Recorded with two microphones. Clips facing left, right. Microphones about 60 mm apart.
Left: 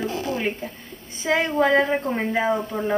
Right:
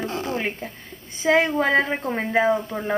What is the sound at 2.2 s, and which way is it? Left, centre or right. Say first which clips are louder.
Female singing: right 6 dB; centre.